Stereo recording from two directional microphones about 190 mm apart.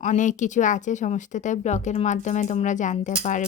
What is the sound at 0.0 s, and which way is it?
Speech, 40° left (ahead or behind).